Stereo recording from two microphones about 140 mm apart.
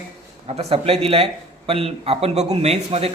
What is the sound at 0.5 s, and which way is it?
A man's voice, 45° right (ahead or behind).